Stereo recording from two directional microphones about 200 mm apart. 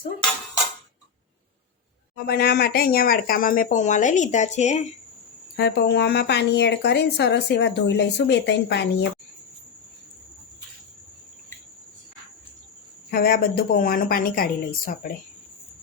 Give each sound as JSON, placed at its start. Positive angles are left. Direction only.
{"t": 2.1, "sound": "speech", "side_deg": 55}
{"t": 5.5, "sound": "speech", "side_deg": 55}
{"t": 13.1, "sound": "speech", "side_deg": 50}